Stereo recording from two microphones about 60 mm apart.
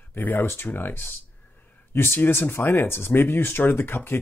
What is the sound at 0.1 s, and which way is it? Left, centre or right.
Speech, left.